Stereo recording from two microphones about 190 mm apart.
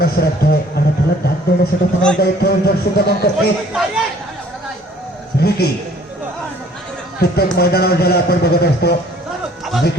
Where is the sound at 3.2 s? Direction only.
55° left (ahead or behind).